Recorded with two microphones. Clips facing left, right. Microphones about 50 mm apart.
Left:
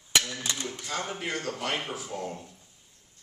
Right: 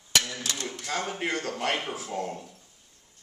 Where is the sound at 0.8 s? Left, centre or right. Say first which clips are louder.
Right 4 dB; right.